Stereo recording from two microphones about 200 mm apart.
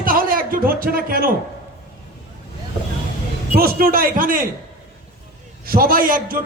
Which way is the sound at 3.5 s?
45° right (ahead or behind).